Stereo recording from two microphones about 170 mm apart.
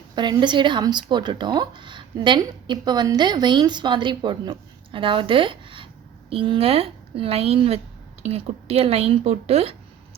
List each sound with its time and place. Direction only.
0.2 s a woman's voice: 25° right (ahead or behind)